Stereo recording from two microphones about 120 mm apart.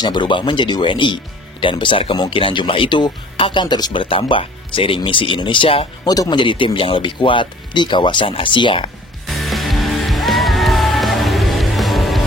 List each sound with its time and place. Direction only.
0.0 s speech: 40° left (ahead or behind)
6.0 s speech: 30° left (ahead or behind)
6.4 s speech: 45° left (ahead or behind)
9.2 s music: centre (ahead or behind)